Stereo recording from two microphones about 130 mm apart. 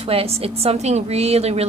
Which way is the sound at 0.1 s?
50° right (ahead or behind).